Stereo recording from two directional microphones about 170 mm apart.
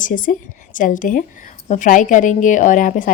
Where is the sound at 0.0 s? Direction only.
50° left (ahead or behind).